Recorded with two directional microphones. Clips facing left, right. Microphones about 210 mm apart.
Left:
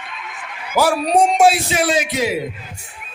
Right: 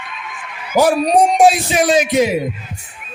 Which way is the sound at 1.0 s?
15° right (ahead or behind).